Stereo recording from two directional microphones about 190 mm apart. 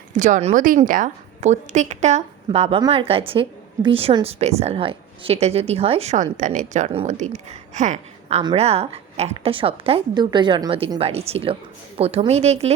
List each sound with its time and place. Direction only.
0.2 s a woman's voice: 40° right (ahead or behind)